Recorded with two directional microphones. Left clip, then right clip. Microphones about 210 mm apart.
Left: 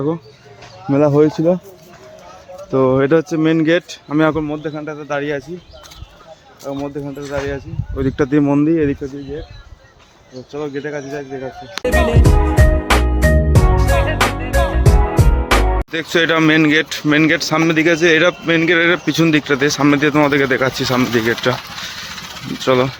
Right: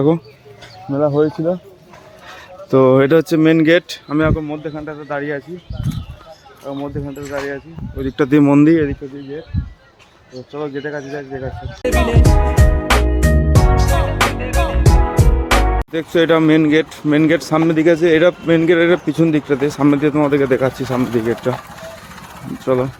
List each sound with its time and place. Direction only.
0.9 s speech: 30° left (ahead or behind)
2.7 s speech: 10° right (ahead or behind)
4.4 s speech: 15° left (ahead or behind)
6.7 s speech: 5° left (ahead or behind)
8.3 s speech: 15° right (ahead or behind)
10.5 s speech: 10° right (ahead or behind)
13.5 s music: centre (ahead or behind)
15.9 s speech: 10° right (ahead or behind)
22.6 s speech: 5° right (ahead or behind)